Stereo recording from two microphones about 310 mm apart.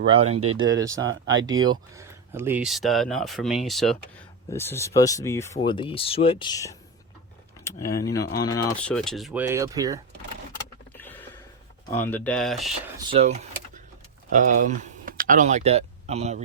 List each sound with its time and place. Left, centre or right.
0.0 s speech: centre
0.3 s speech: right
0.8 s speech: centre
1.0 s speech: right
1.6 s speech: centre
7.6 s a sound: centre
8.4 s speech: centre
10.9 s a sound: centre
11.9 s speech: centre
13.0 s speech: centre